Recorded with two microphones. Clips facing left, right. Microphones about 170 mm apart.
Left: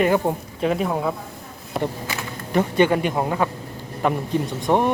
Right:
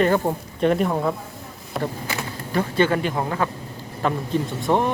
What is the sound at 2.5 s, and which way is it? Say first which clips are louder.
Speech: left 2 dB; 15° left (ahead or behind).